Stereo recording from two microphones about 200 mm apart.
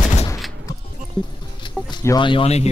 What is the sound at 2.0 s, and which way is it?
Speech, 20° left (ahead or behind).